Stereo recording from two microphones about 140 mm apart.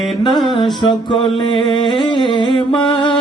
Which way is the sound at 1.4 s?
35° left (ahead or behind).